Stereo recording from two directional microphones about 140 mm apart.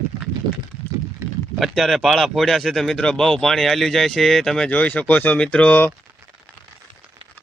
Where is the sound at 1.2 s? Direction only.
15° right (ahead or behind).